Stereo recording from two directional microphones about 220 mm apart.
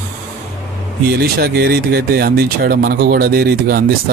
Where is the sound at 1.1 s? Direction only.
45° right (ahead or behind).